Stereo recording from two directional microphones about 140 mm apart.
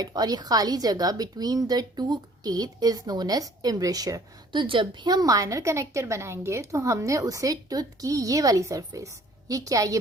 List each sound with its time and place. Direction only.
0.0 s a woman's voice: 30° right (ahead or behind)